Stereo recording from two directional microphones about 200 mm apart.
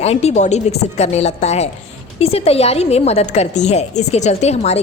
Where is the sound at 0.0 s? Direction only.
30° left (ahead or behind).